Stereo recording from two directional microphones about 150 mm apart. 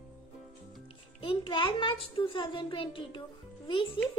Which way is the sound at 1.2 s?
35° left (ahead or behind).